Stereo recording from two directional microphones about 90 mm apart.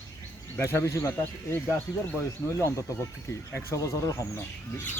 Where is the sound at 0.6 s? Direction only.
30° left (ahead or behind).